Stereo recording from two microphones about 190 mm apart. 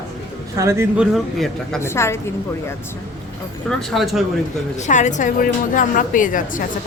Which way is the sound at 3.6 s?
Centre (ahead or behind).